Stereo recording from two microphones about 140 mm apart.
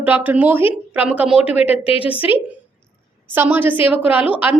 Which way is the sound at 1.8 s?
45° left (ahead or behind).